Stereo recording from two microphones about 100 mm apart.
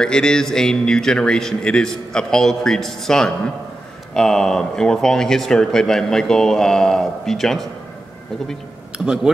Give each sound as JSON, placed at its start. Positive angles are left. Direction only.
{"t": 0.0, "sound": "a man's voice", "side_deg": 5}
{"t": 8.9, "sound": "speech", "side_deg": -5}